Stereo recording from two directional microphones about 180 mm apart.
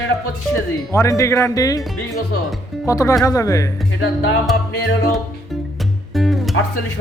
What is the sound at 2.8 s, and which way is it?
Speech, 15° left (ahead or behind).